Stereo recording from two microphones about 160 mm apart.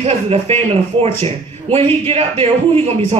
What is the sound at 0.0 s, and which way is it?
Speech, 40° right (ahead or behind).